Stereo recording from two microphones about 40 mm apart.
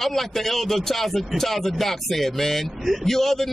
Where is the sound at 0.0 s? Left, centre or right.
Centre.